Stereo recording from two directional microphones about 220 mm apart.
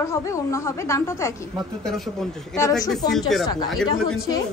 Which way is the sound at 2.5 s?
15° left (ahead or behind).